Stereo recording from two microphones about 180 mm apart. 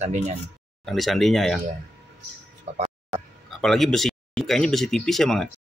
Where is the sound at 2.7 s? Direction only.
40° right (ahead or behind).